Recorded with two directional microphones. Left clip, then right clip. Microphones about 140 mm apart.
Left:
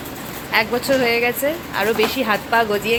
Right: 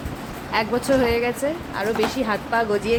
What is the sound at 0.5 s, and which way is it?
Speech, 10° right (ahead or behind).